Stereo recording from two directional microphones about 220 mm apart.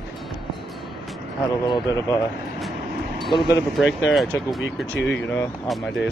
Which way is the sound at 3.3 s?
15° left (ahead or behind).